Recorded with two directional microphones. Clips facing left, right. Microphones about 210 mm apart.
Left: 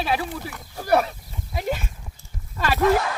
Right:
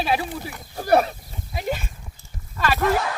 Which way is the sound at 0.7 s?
30° right (ahead or behind).